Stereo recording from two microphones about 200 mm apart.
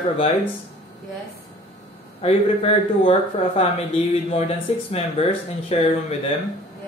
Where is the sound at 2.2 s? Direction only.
30° left (ahead or behind).